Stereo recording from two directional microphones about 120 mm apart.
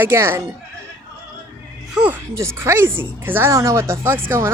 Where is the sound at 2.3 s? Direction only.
25° right (ahead or behind).